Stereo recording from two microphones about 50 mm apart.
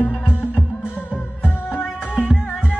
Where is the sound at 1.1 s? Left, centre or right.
Left.